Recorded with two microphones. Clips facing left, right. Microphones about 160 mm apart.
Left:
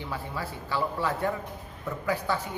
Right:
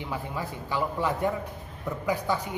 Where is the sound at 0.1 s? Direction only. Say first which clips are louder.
Right 2 dB; 15° right (ahead or behind).